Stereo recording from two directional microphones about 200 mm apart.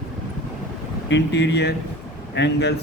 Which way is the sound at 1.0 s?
60° left (ahead or behind).